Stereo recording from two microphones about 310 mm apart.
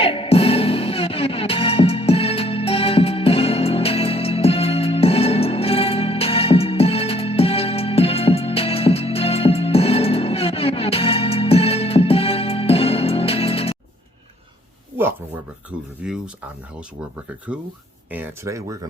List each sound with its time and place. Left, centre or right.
0.0 s music: centre
16.0 s speech: centre
18.1 s speech: centre